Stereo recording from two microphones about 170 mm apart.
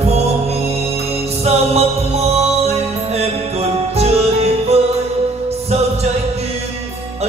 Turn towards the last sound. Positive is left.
turn(degrees=-40)  # may be behind; listen again after turning